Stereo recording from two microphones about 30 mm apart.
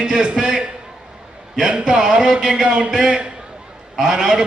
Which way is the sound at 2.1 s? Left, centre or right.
Right.